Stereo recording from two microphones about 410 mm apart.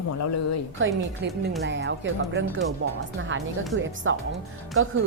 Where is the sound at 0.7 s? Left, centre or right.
Right.